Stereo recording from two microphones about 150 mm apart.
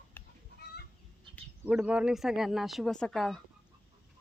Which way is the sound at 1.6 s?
10° right (ahead or behind).